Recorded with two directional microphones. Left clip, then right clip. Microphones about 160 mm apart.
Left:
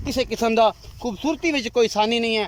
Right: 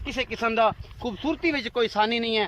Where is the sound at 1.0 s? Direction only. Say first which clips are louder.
Left 3 dB; 15° left (ahead or behind).